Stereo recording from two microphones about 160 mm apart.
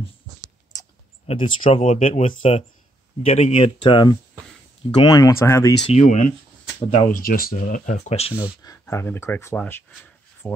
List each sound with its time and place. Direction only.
1.2 s speech: 35° left (ahead or behind); by 5.8 s 20° left (ahead or behind)
5.9 s speech: 50° left (ahead or behind)
7.1 s speech: 60° left (ahead or behind); by 8.4 s 40° left (ahead or behind)
8.6 s speech: 15° left (ahead or behind)